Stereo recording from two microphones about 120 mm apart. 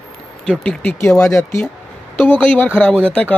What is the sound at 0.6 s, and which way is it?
Speech, 10° left (ahead or behind).